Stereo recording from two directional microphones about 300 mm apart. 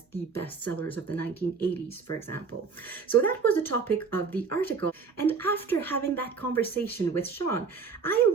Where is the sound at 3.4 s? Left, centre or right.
Centre.